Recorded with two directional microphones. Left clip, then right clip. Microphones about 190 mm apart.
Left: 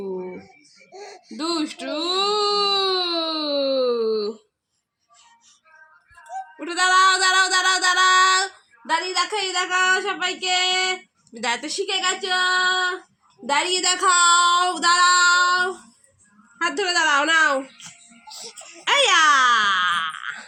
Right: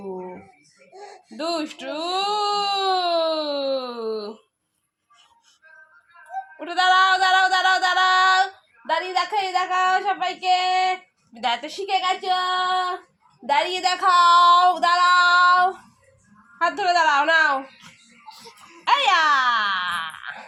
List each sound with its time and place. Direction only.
0.9 s a sound: centre (ahead or behind)
6.6 s female singing: 5° right (ahead or behind)
11.3 s child singing: 10° right (ahead or behind)
13.5 s female singing: 10° right (ahead or behind)
16.6 s speech: 5° right (ahead or behind)